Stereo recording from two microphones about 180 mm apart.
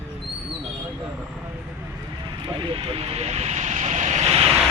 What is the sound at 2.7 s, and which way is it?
Speech, 30° right (ahead or behind).